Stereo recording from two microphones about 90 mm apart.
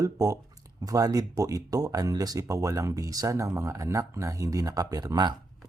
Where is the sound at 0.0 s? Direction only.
40° right (ahead or behind).